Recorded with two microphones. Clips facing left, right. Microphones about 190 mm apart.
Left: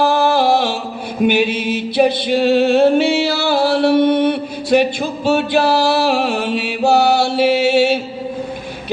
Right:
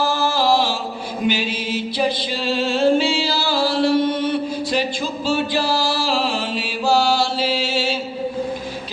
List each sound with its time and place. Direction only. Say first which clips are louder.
0.0 s mantra: left 6 dB; 60° left (ahead or behind)